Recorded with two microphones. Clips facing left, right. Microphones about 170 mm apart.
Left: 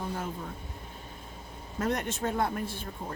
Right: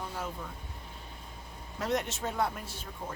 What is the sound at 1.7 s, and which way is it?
Speech, 50° left (ahead or behind).